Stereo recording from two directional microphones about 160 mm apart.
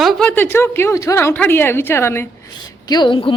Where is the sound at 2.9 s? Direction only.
30° left (ahead or behind).